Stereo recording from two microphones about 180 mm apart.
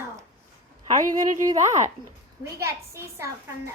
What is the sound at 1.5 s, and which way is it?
A woman's voice, 15° right (ahead or behind).